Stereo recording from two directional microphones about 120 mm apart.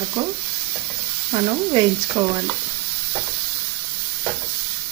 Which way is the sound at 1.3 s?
40° right (ahead or behind).